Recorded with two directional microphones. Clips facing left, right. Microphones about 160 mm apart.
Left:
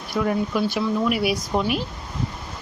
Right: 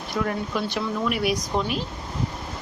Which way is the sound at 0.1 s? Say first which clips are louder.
Left 4 dB; 15° left (ahead or behind).